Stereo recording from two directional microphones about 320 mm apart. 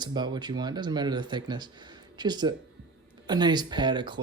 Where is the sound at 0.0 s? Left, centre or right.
Centre.